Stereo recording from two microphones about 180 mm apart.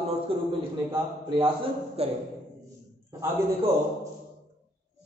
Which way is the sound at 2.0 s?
35° right (ahead or behind).